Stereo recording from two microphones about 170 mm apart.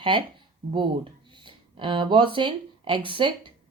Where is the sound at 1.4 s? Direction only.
30° right (ahead or behind).